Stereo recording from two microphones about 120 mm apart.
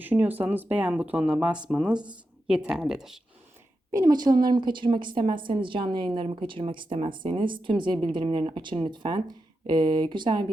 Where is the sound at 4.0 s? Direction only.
35° right (ahead or behind).